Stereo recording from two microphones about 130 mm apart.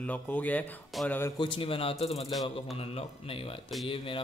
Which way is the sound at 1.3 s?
40° left (ahead or behind).